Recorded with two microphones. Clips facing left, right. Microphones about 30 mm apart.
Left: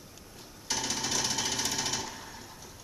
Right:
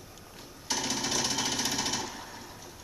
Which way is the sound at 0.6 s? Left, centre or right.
Centre.